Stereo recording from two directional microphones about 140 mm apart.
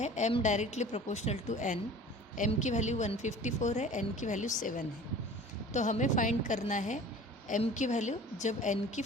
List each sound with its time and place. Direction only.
0.0 s speech: 55° left (ahead or behind)
5.7 s speech: 60° left (ahead or behind)